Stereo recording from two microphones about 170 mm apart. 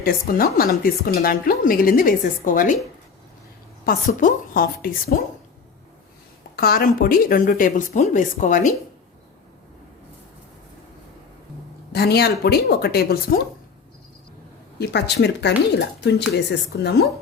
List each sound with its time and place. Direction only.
0.0 s speech: 60° left (ahead or behind)
3.8 s speech: 55° left (ahead or behind)
6.6 s speech: 65° left (ahead or behind)
11.9 s speech: 70° left (ahead or behind)
14.8 s speech: 80° left